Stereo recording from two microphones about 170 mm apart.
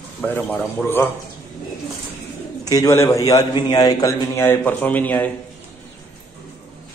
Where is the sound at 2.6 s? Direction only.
20° left (ahead or behind).